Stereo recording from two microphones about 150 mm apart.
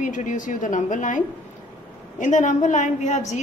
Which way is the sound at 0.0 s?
55° left (ahead or behind).